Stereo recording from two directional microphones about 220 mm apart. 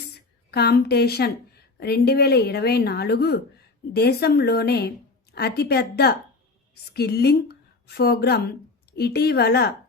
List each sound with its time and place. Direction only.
0.5 s a woman's voice: 45° left (ahead or behind)